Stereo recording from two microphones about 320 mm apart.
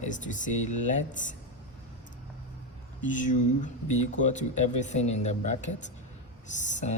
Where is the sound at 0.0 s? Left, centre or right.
Left.